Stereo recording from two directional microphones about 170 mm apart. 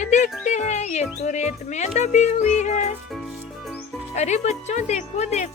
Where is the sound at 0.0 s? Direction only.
45° left (ahead or behind).